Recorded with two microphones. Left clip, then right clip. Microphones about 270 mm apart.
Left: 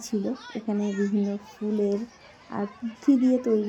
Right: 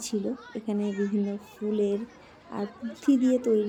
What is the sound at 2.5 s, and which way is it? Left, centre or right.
Speech, centre.